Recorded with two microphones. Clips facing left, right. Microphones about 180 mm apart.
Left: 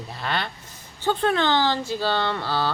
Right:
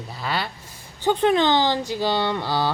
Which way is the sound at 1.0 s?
15° right (ahead or behind).